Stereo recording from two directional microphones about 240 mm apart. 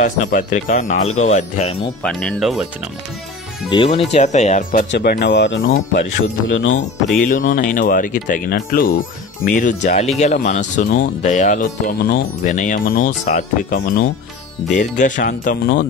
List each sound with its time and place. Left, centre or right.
0.0 s speech: left
2.0 s speech: centre
3.7 s speech: left
7.2 s speech: left